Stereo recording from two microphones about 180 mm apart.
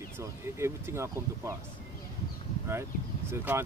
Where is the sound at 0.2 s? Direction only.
15° right (ahead or behind).